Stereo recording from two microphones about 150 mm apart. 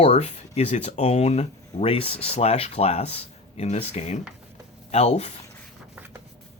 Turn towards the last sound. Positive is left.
turn(degrees=45)  # may be behind; listen again after turning